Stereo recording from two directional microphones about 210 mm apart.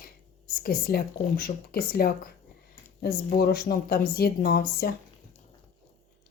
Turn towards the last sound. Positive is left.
turn(degrees=45)  # may be behind; listen again after turning